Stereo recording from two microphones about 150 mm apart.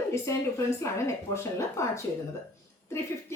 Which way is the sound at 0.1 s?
20° left (ahead or behind).